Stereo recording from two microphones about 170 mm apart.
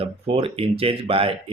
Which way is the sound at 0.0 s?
35° right (ahead or behind).